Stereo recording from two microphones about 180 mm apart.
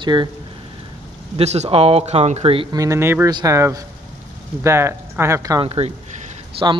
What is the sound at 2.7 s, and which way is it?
Speech, 15° right (ahead or behind).